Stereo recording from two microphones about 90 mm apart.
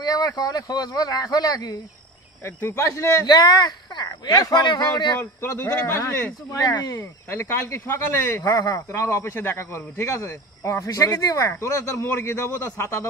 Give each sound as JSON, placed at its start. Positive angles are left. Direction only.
{"t": 0.0, "sound": "speech", "side_deg": 40}
{"t": 2.4, "sound": "speech", "side_deg": 30}
{"t": 3.3, "sound": "speech", "side_deg": 55}
{"t": 5.2, "sound": "a man's voice", "side_deg": 25}
{"t": 7.0, "sound": "speech", "side_deg": 25}